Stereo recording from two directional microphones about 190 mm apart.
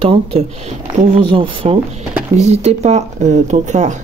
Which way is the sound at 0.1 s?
30° right (ahead or behind).